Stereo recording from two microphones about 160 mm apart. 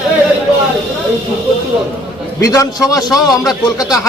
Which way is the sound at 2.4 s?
20° left (ahead or behind).